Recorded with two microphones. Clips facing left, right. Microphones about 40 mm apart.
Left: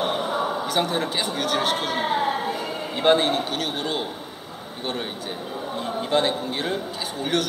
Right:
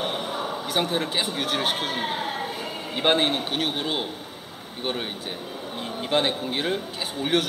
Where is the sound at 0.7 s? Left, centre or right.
Centre.